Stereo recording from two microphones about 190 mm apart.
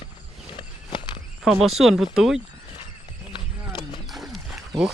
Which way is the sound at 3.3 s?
25° left (ahead or behind).